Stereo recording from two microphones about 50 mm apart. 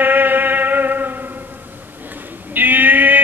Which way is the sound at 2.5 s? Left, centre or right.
Right.